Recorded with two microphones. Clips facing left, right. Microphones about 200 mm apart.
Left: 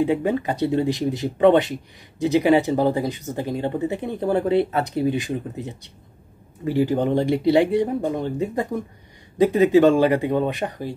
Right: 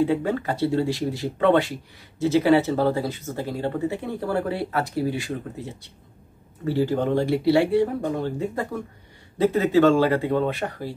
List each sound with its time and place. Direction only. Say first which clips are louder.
0.0 s speech: left 2 dB; 15° left (ahead or behind)